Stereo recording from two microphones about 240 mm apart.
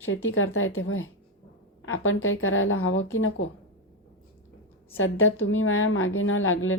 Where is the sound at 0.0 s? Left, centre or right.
Left.